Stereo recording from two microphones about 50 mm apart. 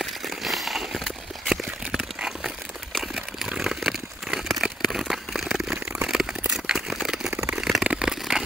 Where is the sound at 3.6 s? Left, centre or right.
Centre.